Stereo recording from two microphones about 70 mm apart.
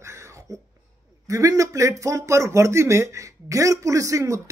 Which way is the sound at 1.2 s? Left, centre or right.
Right.